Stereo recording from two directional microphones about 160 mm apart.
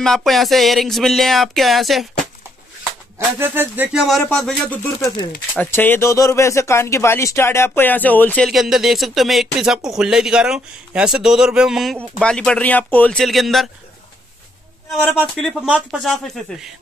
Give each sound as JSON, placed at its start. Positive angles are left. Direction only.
{"t": 0.0, "sound": "speech", "side_deg": 0}
{"t": 3.3, "sound": "speech", "side_deg": -15}
{"t": 5.0, "sound": "speech", "side_deg": 25}
{"t": 5.6, "sound": "speech", "side_deg": 10}
{"t": 8.5, "sound": "speech", "side_deg": 0}
{"t": 15.4, "sound": "speech", "side_deg": -5}